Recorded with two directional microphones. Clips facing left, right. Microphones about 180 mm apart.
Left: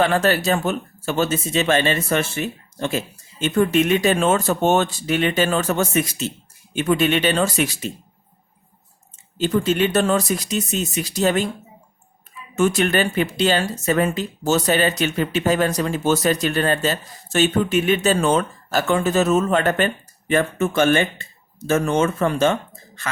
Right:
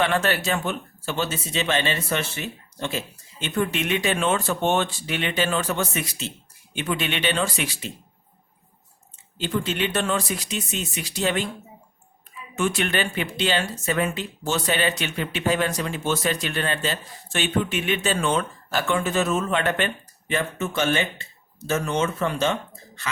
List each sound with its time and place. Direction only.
0.0 s speech: 35° left (ahead or behind)
9.4 s speech: 40° left (ahead or behind)
12.5 s speech: 40° left (ahead or behind)